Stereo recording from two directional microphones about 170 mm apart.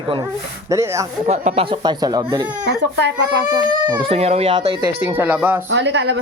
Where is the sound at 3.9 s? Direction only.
35° right (ahead or behind).